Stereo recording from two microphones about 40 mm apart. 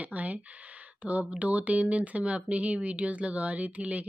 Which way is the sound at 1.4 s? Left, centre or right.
Right.